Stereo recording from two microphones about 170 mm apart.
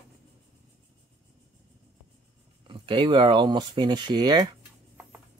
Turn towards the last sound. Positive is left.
turn(degrees=-25)  # may be behind; listen again after turning